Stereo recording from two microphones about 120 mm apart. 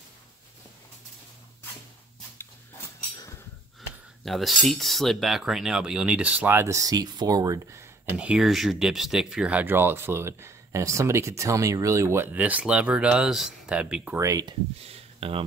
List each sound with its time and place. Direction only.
4.2 s speech: centre (ahead or behind); by 7.8 s 30° right (ahead or behind)
8.0 s speech: 10° right (ahead or behind)
14.1 s speech: 25° right (ahead or behind)
14.9 s a sound: 55° right (ahead or behind)